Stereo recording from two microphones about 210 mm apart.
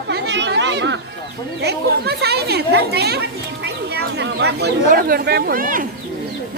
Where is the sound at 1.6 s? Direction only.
50° right (ahead or behind).